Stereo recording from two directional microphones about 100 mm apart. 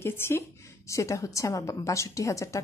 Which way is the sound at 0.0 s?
25° left (ahead or behind).